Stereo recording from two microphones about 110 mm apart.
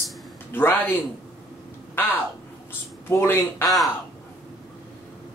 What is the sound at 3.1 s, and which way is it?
Speech, 20° left (ahead or behind).